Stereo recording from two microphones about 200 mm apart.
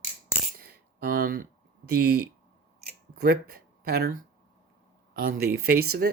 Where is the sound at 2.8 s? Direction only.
50° right (ahead or behind).